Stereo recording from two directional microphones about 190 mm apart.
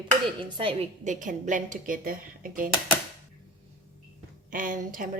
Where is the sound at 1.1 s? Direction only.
40° right (ahead or behind).